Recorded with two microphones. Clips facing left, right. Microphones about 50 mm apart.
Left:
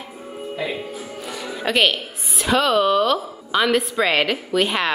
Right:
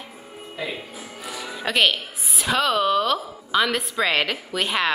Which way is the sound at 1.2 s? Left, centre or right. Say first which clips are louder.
Left 2 dB; centre.